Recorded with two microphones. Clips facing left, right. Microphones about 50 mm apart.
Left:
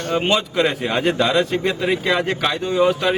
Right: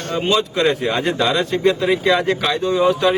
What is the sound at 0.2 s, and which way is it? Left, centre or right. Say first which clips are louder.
Speech: right 3 dB; left.